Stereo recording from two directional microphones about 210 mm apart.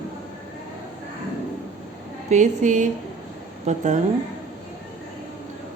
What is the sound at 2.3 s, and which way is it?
A woman's voice, 35° right (ahead or behind).